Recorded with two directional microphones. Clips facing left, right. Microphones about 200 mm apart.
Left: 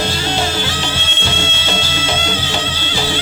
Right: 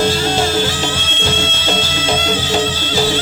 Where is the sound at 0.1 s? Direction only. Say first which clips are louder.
Right 4 dB; 45° right (ahead or behind).